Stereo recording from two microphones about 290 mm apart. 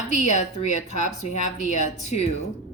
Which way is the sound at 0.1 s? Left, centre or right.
Left.